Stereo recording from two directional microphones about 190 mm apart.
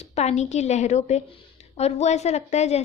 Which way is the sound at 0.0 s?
35° left (ahead or behind).